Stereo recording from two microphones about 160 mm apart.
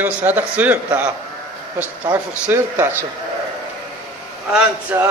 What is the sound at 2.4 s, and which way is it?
Speech, 10° right (ahead or behind).